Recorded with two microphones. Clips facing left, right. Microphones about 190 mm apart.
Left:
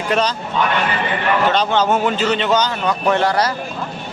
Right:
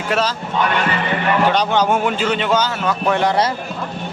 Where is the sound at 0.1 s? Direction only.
5° right (ahead or behind).